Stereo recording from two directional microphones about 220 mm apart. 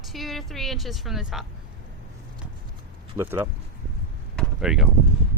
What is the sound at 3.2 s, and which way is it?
Speech, 10° right (ahead or behind).